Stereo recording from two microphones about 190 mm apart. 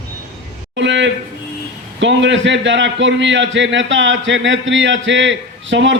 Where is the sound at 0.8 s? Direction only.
75° right (ahead or behind).